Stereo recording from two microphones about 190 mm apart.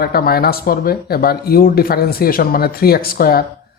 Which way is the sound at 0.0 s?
55° left (ahead or behind).